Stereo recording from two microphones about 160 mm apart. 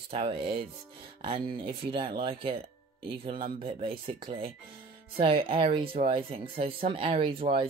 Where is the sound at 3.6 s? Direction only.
35° right (ahead or behind).